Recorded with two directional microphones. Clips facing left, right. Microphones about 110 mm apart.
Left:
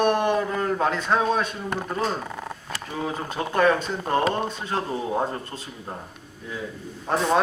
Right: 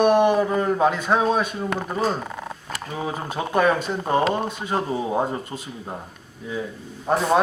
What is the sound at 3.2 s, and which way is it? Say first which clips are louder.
Speech: right 1 dB; 10° right (ahead or behind).